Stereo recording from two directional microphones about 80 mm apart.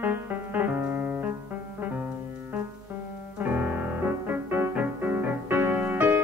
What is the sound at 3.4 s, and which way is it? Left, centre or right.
Music, right.